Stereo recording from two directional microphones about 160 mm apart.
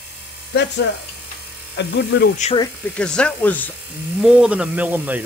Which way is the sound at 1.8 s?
90° left.